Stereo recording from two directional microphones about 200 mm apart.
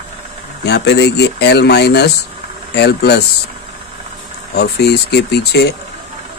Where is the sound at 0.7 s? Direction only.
55° left (ahead or behind).